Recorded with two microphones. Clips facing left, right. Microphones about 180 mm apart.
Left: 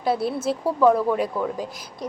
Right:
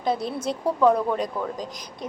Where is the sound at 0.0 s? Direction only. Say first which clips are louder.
Left 3 dB; 5° left (ahead or behind).